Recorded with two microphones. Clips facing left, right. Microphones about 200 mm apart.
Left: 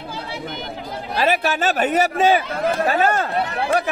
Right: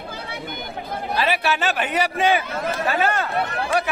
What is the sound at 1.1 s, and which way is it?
Speech, 45° left (ahead or behind).